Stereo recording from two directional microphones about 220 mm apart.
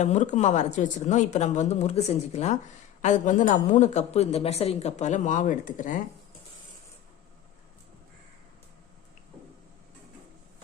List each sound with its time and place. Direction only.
0.0 s a woman's voice: 30° left (ahead or behind)